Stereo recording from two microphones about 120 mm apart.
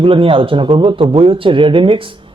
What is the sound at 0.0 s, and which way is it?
Speech, 45° right (ahead or behind).